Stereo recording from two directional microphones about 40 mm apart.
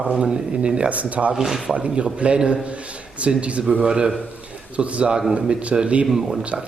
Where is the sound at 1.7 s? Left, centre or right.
Right.